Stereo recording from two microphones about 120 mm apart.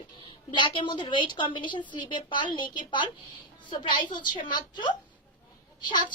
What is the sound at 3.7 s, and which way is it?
A woman's voice, 40° left (ahead or behind).